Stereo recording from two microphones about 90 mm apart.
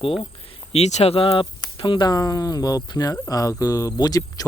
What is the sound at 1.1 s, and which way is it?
Speech, 85° left.